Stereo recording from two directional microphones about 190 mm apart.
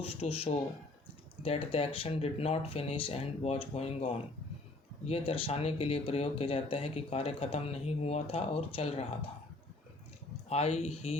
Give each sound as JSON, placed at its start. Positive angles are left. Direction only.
{"t": 0.0, "sound": "speech", "side_deg": 30}
{"t": 10.5, "sound": "speech", "side_deg": 35}